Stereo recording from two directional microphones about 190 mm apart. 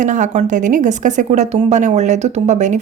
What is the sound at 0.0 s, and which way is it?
A woman's voice, 40° right (ahead or behind).